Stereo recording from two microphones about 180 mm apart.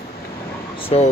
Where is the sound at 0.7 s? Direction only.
35° left (ahead or behind).